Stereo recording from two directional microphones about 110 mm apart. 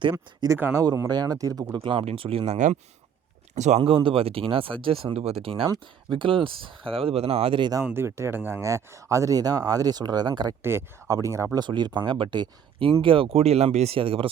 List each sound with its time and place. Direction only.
0.0 s speech: 45° right (ahead or behind)
0.4 s speech: 25° right (ahead or behind)
0.9 s speech: 35° right (ahead or behind)
1.8 s speech: 55° right (ahead or behind)
3.5 s speech: 90° right
3.8 s speech: 55° right (ahead or behind)
7.9 s speech: 25° right (ahead or behind); by 10.5 s 40° right (ahead or behind)
10.6 s speech: 20° right (ahead or behind)
11.6 s speech: 45° right (ahead or behind)